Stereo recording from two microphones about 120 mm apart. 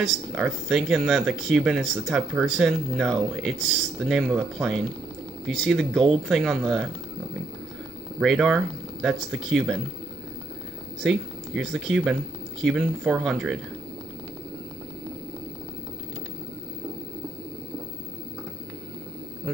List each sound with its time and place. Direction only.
0.0 s speech: centre (ahead or behind)
8.2 s speech: centre (ahead or behind)
11.0 s speech: centre (ahead or behind)